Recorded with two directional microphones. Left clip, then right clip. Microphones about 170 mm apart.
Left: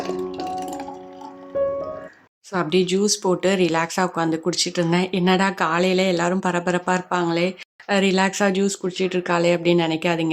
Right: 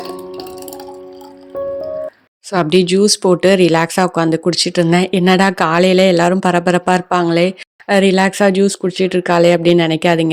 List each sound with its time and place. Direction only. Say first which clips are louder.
2.5 s speech: right 7 dB; 40° right (ahead or behind)